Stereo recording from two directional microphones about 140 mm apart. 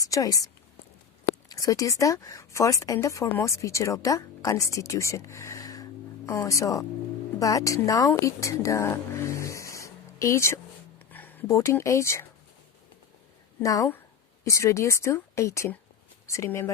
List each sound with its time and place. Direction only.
0.0 s a woman's voice: 25° left (ahead or behind)
13.6 s a woman's voice: 25° left (ahead or behind)